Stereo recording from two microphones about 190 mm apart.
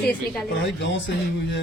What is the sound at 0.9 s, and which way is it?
Speech, 70° left (ahead or behind).